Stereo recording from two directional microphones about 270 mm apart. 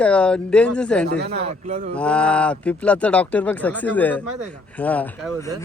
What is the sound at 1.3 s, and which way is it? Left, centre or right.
Speech, right.